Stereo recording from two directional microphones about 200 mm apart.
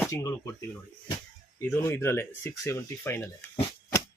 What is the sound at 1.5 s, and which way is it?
Speech, 15° left (ahead or behind).